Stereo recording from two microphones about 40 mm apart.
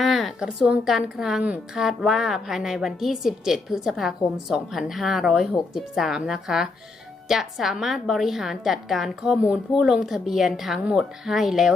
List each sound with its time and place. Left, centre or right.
0.0 s a sound: centre
0.3 s a woman's voice: right
1.1 s a woman's voice: centre